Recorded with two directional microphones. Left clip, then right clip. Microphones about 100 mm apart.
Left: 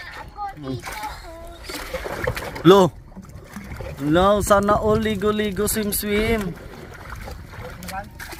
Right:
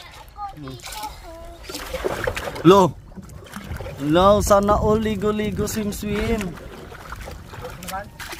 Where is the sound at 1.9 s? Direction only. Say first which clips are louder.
Right 4 dB; 25° left (ahead or behind).